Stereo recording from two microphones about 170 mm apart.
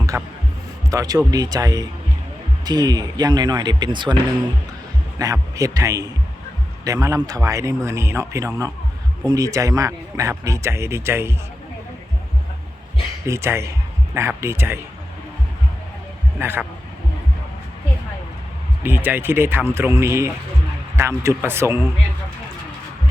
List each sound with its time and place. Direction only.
0.1 s a man's voice: 15° right (ahead or behind)
5.2 s a man's voice: 20° right (ahead or behind)
13.2 s a man's voice: 15° right (ahead or behind)
16.4 s a man's voice: 15° right (ahead or behind)
18.8 s a man's voice: 10° right (ahead or behind)